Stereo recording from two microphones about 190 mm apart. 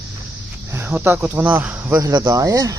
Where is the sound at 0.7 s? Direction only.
10° right (ahead or behind).